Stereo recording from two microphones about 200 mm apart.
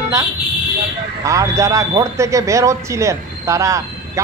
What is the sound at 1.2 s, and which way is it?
A man's voice, 15° right (ahead or behind).